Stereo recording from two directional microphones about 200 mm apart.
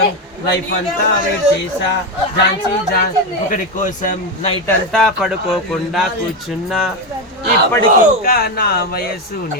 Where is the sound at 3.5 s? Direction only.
40° left (ahead or behind).